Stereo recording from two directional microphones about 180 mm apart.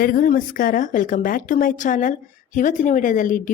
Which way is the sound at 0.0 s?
50° left (ahead or behind).